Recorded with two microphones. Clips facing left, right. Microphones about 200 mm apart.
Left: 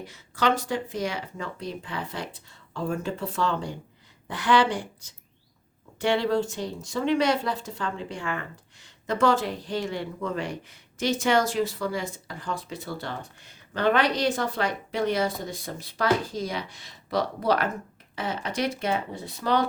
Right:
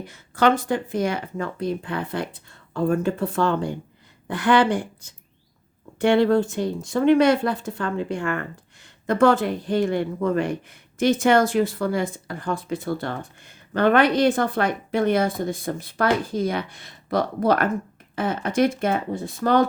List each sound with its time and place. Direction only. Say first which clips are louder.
0.1 s speech: right 6 dB; 55° right (ahead or behind)